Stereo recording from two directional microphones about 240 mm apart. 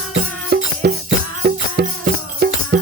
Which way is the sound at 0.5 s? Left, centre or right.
Right.